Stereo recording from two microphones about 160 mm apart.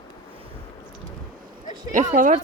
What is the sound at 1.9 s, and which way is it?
Speech, 55° right (ahead or behind).